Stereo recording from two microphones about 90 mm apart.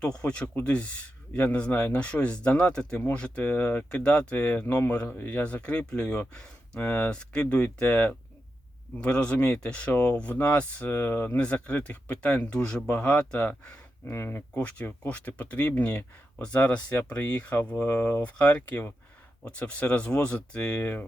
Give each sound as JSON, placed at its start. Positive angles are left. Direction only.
{"t": 0.2, "sound": "speech", "side_deg": 10}
{"t": 11.3, "sound": "speech", "side_deg": 10}
{"t": 14.1, "sound": "speech", "side_deg": 25}